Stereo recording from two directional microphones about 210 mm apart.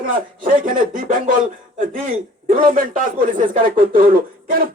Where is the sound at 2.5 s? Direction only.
40° right (ahead or behind).